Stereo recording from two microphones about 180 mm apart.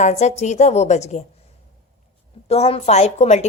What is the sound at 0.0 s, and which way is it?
A woman's voice, 40° left (ahead or behind).